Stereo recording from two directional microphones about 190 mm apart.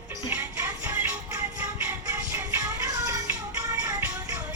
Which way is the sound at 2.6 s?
20° right (ahead or behind).